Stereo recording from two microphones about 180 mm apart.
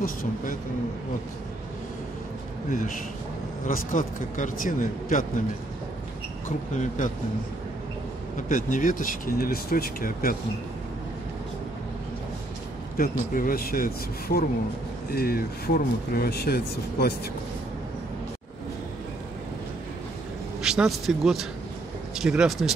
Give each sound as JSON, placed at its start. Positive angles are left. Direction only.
{"t": 0.0, "sound": "speech", "side_deg": 50}
{"t": 3.6, "sound": "speech", "side_deg": 50}
{"t": 6.7, "sound": "speech", "side_deg": 40}
{"t": 8.4, "sound": "speech", "side_deg": 50}
{"t": 13.0, "sound": "speech", "side_deg": 55}
{"t": 20.6, "sound": "a man's voice", "side_deg": -5}